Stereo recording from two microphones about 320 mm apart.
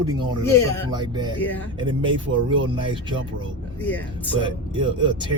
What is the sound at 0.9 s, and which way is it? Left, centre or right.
Speech, centre.